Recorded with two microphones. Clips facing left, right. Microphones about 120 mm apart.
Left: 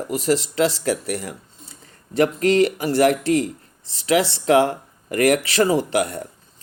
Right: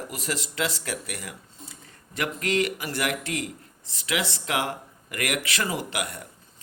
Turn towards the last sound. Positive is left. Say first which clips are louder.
# left 11 dB
turn(degrees=35)  # may be behind; listen again after turning